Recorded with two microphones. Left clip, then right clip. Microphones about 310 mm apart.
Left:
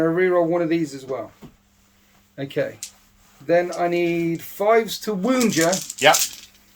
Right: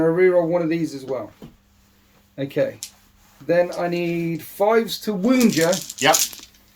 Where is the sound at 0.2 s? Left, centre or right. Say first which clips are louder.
Right 2 dB; centre.